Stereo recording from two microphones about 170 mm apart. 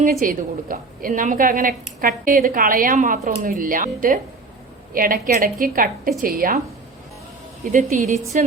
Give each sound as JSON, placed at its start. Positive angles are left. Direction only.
{"t": 0.0, "sound": "a woman's voice", "side_deg": -55}
{"t": 7.7, "sound": "speech", "side_deg": -50}